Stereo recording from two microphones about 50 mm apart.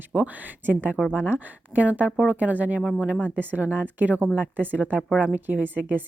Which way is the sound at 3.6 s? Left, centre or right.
Right.